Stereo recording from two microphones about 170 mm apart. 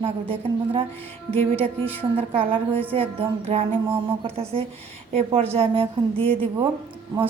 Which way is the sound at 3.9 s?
15° right (ahead or behind).